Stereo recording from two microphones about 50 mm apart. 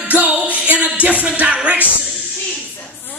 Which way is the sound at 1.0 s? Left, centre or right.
Right.